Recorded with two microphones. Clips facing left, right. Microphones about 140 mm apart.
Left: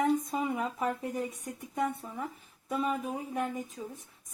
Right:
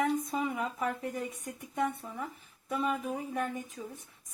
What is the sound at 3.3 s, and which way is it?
Speech, 15° left (ahead or behind).